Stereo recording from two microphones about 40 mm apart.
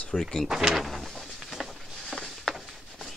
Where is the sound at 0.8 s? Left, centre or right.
Centre.